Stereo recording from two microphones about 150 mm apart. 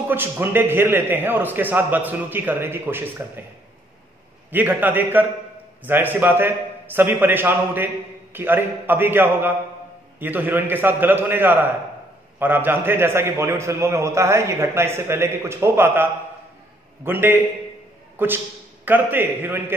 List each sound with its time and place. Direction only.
0.1 s a man's voice: 15° right (ahead or behind)
4.5 s a man's voice: 10° right (ahead or behind)
18.1 s a sound: 15° right (ahead or behind)
18.9 s a man's voice: 10° right (ahead or behind)